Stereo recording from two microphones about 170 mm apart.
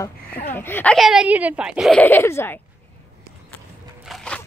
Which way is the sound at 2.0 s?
10° left (ahead or behind).